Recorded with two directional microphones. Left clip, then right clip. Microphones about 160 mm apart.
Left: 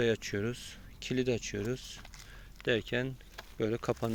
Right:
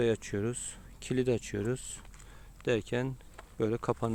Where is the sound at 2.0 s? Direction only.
65° left (ahead or behind).